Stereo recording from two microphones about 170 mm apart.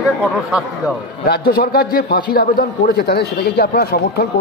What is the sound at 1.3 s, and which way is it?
A man's voice, 65° left (ahead or behind).